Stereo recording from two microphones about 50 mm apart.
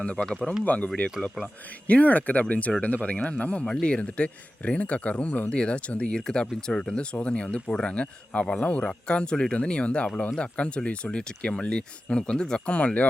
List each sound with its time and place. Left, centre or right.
0.0 s a man's voice: left
1.4 s speech: centre
1.9 s a man's voice: left